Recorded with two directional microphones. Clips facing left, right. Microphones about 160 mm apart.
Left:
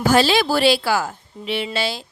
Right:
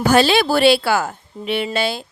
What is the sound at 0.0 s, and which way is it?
Speech, 60° right (ahead or behind).